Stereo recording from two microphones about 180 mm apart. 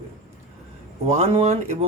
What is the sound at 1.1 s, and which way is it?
Speech, 35° right (ahead or behind).